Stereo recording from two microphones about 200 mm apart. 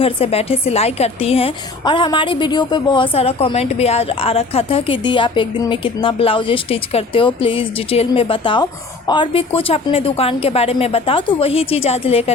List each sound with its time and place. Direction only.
0.0 s a woman's voice: 30° left (ahead or behind)